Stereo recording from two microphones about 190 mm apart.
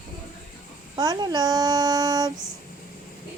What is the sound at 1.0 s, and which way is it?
Speech, 20° right (ahead or behind).